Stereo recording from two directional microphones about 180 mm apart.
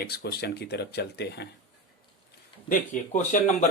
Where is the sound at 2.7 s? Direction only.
45° left (ahead or behind).